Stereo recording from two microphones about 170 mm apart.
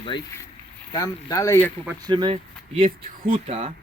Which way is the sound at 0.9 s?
20° left (ahead or behind).